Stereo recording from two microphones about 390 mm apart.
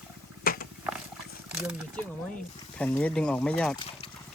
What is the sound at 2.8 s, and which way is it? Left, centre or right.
Speech, centre.